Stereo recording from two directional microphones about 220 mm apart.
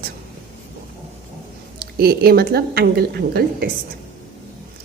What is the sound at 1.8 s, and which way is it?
A woman's voice, 45° right (ahead or behind).